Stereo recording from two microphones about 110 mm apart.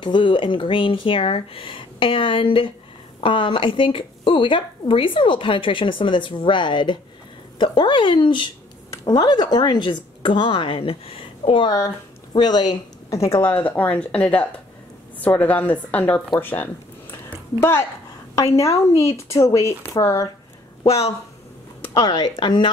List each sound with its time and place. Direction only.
0.0 s speech: 45° left (ahead or behind)
12.3 s speech: 40° left (ahead or behind); by 16.6 s 20° left (ahead or behind)
17.1 s a sound: 20° left (ahead or behind)
18.3 s speech: 30° left (ahead or behind)
20.8 s speech: 65° left (ahead or behind)
21.9 s speech: 35° left (ahead or behind)